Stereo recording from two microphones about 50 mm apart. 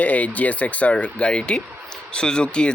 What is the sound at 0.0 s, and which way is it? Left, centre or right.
Speech, left.